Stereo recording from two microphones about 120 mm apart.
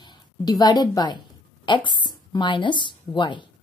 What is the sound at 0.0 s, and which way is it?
A woman's voice, 35° left (ahead or behind).